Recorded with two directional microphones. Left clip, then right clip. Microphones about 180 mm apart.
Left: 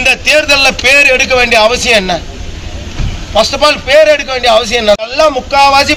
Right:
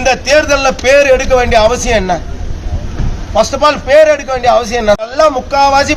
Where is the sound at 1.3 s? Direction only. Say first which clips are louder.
Left 1 dB; 15° right (ahead or behind).